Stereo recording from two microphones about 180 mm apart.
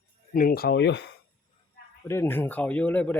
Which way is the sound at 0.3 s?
55° left (ahead or behind).